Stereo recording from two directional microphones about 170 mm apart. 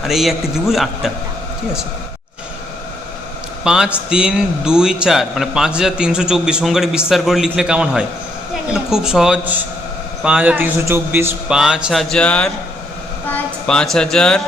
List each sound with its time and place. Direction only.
0.0 s a man's voice: centre (ahead or behind)
3.6 s a man's voice: 5° right (ahead or behind)